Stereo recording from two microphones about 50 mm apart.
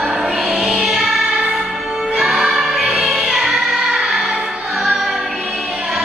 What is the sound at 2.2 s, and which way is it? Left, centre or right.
Music, centre.